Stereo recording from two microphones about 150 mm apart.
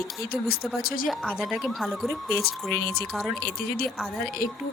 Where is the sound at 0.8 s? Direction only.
75° left (ahead or behind).